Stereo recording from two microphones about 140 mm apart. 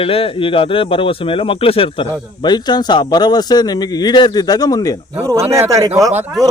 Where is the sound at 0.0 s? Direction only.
40° left (ahead or behind); by 4.9 s 25° left (ahead or behind).